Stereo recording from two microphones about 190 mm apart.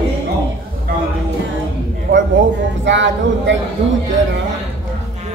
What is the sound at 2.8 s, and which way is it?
Speech, 70° right (ahead or behind).